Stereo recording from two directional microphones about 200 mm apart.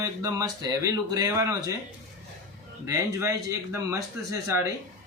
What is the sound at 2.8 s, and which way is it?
Speech, 15° right (ahead or behind).